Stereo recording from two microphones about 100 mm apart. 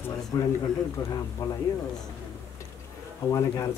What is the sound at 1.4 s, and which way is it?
Speech, 30° left (ahead or behind).